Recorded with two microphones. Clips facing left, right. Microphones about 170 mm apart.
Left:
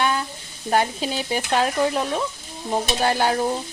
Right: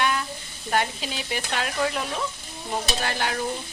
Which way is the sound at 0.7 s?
35° left (ahead or behind).